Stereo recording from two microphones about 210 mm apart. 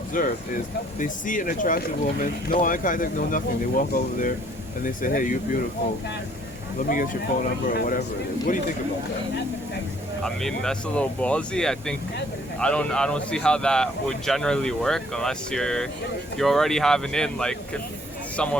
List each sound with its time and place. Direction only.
0.1 s speech: 40° left (ahead or behind)
6.8 s speech: 40° left (ahead or behind)
10.2 s speech: 5° left (ahead or behind)